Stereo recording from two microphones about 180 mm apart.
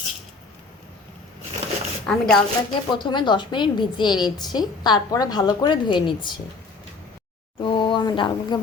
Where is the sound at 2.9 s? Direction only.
25° left (ahead or behind).